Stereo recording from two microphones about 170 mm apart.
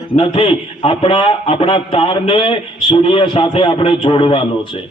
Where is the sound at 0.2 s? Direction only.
30° left (ahead or behind).